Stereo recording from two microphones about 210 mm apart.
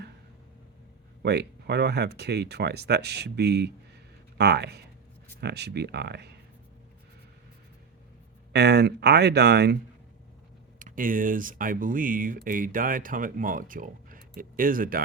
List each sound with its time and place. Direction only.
1.2 s speech: 50° right (ahead or behind)
8.5 s speech: 50° right (ahead or behind)
10.8 s speech: 40° right (ahead or behind)